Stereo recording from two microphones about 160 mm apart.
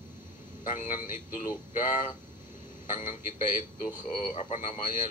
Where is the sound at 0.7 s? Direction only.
55° left (ahead or behind).